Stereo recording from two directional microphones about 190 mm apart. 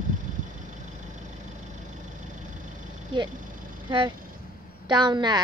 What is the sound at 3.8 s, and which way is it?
A woman's voice, 25° right (ahead or behind).